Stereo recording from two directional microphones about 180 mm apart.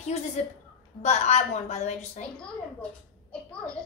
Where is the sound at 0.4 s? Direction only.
40° left (ahead or behind).